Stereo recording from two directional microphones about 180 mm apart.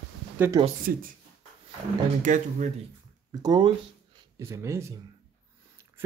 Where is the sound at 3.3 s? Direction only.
20° right (ahead or behind).